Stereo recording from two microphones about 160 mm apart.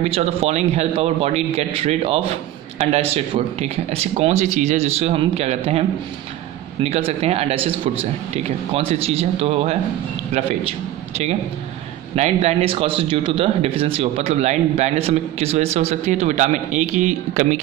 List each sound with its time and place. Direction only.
0.0 s speech: 40° right (ahead or behind)
6.8 s speech: 40° right (ahead or behind)
12.2 s speech: 40° right (ahead or behind)